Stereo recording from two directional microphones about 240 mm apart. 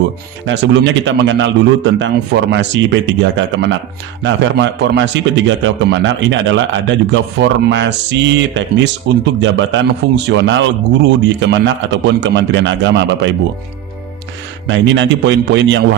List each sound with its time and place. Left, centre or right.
0.4 s a man's voice: right
14.7 s a man's voice: right